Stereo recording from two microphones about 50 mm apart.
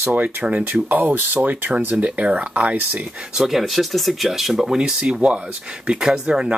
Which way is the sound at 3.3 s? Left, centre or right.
Centre.